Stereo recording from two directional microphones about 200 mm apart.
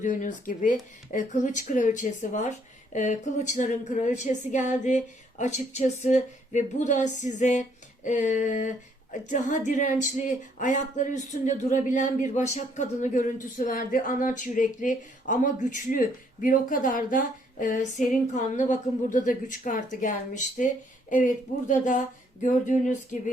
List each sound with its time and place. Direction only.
0.0 s speech: 40° left (ahead or behind)